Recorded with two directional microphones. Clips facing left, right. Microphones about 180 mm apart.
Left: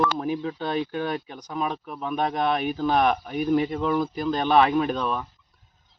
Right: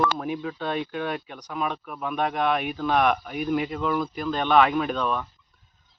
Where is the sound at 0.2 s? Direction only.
30° left (ahead or behind).